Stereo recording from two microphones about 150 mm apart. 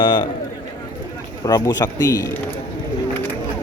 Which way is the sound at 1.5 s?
25° left (ahead or behind).